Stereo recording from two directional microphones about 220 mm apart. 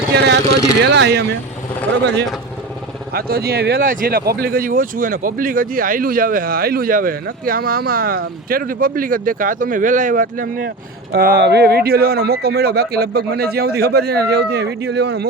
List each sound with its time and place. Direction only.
0.2 s speech: 50° right (ahead or behind)
3.1 s speech: 45° right (ahead or behind)